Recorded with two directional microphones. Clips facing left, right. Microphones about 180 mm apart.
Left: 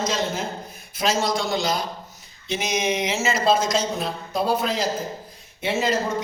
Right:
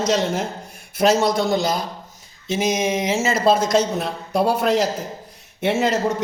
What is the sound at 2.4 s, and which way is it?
A man's voice, 45° right (ahead or behind).